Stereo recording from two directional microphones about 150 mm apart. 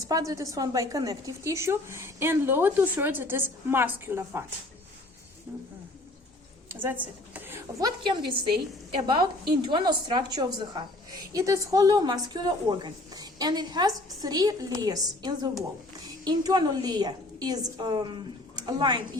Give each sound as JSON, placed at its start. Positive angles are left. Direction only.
{"t": 0.1, "sound": "a woman's voice", "side_deg": -25}
{"t": 6.7, "sound": "a woman's voice", "side_deg": -15}
{"t": 7.8, "sound": "a woman's voice", "side_deg": -30}